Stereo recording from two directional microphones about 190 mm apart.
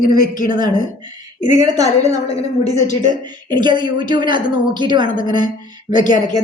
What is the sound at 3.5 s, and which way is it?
A woman's voice, 25° right (ahead or behind).